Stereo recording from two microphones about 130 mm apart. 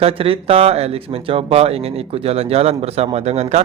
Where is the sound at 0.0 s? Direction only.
45° right (ahead or behind).